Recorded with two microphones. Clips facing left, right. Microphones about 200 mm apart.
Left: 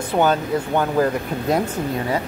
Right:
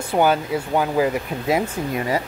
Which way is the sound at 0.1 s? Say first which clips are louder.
Even; 10° right (ahead or behind).